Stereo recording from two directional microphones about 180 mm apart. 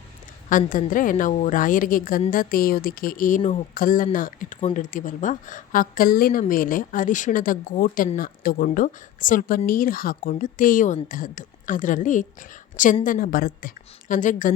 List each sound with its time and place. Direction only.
0.5 s a woman's voice: 45° left (ahead or behind)